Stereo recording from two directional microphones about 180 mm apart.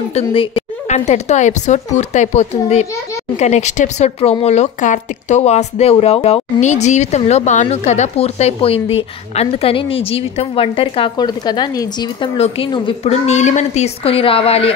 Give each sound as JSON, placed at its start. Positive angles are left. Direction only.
{"t": 0.1, "sound": "speech", "side_deg": 30}